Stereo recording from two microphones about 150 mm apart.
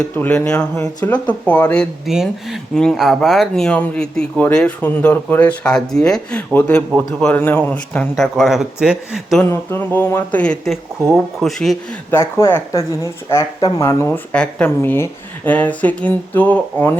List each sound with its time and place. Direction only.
0.0 s speech: 5° left (ahead or behind)
9.4 s speech: 15° left (ahead or behind)
12.1 s speech: 15° left (ahead or behind)
14.3 s speech: 10° left (ahead or behind)